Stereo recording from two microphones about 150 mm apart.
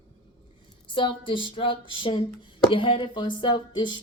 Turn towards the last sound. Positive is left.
turn(degrees=30)  # may be behind; listen again after turning